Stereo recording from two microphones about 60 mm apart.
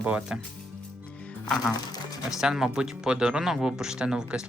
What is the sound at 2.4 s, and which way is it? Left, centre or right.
Speech, centre.